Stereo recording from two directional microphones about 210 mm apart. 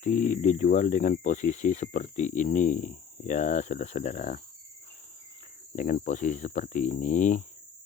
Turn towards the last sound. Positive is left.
turn(degrees=35)  # may be behind; listen again after turning